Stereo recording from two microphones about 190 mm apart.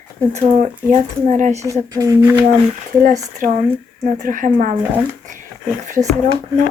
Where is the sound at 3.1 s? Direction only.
40° right (ahead or behind).